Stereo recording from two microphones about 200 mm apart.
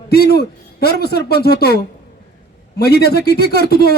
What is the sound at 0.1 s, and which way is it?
A man's voice, 50° left (ahead or behind).